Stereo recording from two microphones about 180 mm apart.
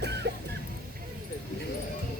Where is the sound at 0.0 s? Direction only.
70° right (ahead or behind).